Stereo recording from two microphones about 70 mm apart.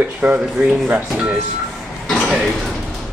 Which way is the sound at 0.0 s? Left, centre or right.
Right.